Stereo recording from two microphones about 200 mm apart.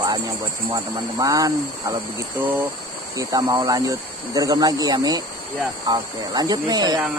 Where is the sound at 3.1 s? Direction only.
15° right (ahead or behind).